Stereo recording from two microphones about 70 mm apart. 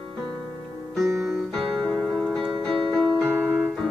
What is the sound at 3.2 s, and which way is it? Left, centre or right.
Piano, right.